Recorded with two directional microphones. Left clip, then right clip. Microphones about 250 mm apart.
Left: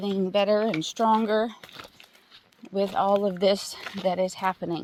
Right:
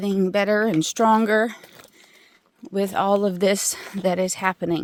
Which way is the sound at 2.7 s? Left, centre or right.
Right.